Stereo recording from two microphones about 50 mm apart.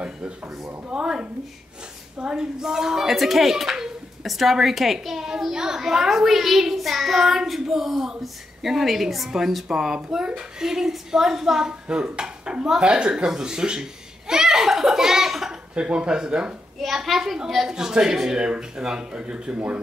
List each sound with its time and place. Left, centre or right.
0.8 s a sound: centre
2.1 s speech: centre
15.7 s speech: right
16.8 s a child's voice: centre